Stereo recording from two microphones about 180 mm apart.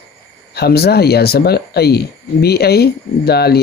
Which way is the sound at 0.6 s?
60° left (ahead or behind).